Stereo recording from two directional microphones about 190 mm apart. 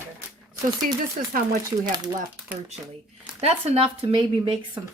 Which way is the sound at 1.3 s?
45° right (ahead or behind).